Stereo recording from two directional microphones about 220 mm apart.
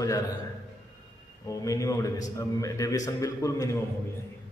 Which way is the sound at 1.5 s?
15° left (ahead or behind).